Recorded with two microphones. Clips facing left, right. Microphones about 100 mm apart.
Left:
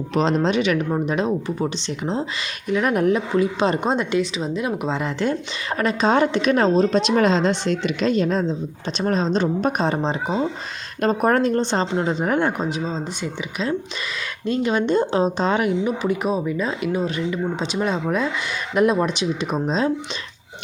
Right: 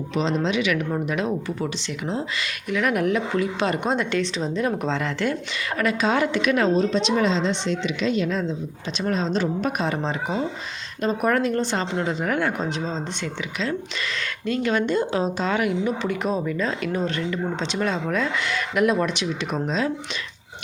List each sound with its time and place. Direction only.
0.1 s speech: 45° left (ahead or behind); by 4.2 s 20° left (ahead or behind)
4.2 s speech: 5° left (ahead or behind); by 7.0 s 35° left (ahead or behind)
7.2 s a woman's voice: 50° left (ahead or behind); by 19.9 s 25° left (ahead or behind)